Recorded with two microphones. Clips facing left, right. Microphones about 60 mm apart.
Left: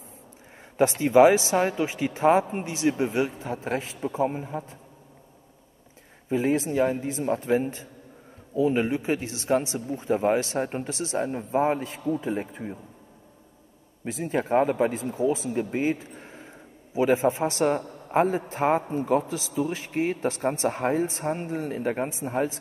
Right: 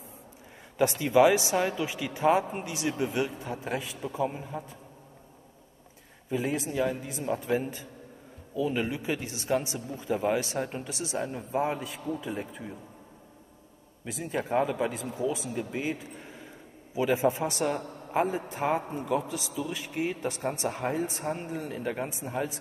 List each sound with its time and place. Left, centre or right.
0.7 s a man's voice: left
6.2 s a man's voice: left
14.0 s a man's voice: left